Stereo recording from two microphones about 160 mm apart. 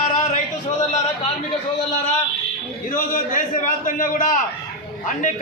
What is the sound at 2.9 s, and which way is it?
A man's voice, 55° left (ahead or behind).